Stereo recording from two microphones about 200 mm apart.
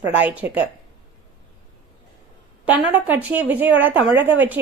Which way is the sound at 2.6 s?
5° right (ahead or behind).